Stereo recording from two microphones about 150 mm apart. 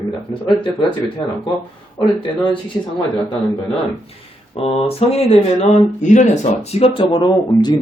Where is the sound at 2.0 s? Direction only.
30° left (ahead or behind).